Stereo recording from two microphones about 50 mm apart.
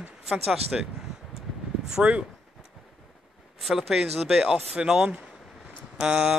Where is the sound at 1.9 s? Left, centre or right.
Right.